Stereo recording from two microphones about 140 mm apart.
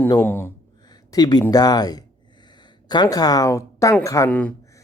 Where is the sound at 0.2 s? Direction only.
15° left (ahead or behind).